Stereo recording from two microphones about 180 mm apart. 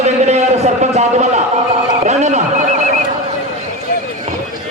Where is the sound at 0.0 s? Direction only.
35° right (ahead or behind).